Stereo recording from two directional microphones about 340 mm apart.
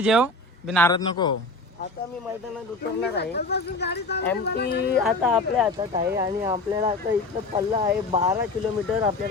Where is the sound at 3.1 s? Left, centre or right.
Left.